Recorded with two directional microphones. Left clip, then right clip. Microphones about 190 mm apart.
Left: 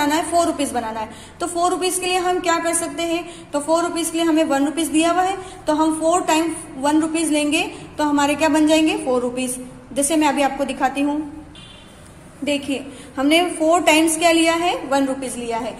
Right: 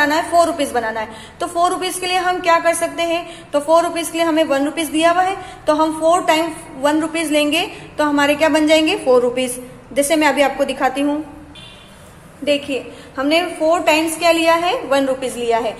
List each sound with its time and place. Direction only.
0.0 s a woman's voice: 20° left (ahead or behind)
12.4 s a woman's voice: 15° left (ahead or behind); by 15.7 s centre (ahead or behind)